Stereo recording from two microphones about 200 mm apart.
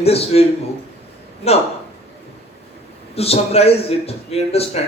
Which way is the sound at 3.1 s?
30° left (ahead or behind).